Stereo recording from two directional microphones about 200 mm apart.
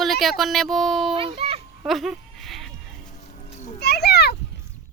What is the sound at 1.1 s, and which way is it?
Speech, 25° right (ahead or behind).